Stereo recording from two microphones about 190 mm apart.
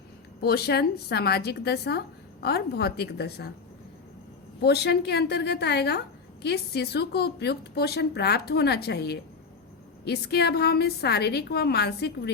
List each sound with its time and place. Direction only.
0.4 s speech: 55° left (ahead or behind)
4.6 s speech: 60° left (ahead or behind)